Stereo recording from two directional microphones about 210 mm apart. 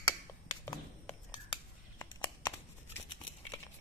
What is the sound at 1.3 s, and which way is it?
Scissors, 20° left (ahead or behind).